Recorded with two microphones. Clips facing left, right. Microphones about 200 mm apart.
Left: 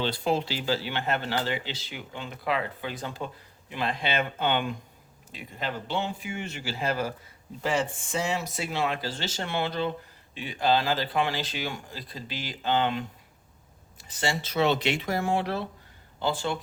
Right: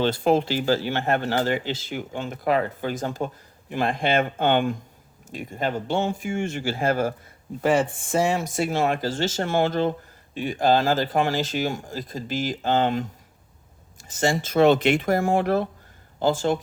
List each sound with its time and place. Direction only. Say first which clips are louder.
0.0 s speech: right 7 dB; 50° right (ahead or behind)